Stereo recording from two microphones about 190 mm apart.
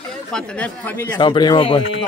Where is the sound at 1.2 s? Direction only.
25° left (ahead or behind).